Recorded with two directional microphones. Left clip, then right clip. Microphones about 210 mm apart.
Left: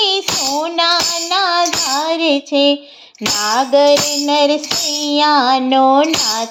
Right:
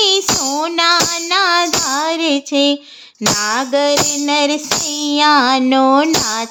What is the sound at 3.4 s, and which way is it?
Child singing, 15° right (ahead or behind).